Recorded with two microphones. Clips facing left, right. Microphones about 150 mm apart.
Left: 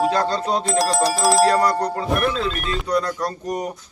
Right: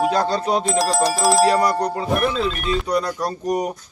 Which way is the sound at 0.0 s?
10° right (ahead or behind).